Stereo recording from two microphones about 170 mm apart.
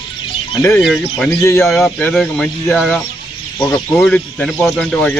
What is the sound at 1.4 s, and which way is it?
Speech, 15° left (ahead or behind).